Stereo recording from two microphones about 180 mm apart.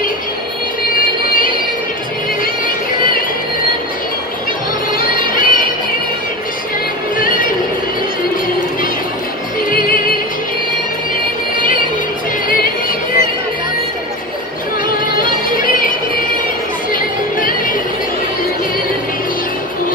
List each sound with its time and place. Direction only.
2.4 s music: 50° left (ahead or behind)
4.9 s music: 50° left (ahead or behind)
7.2 s music: 50° left (ahead or behind)
15.1 s music: 50° left (ahead or behind)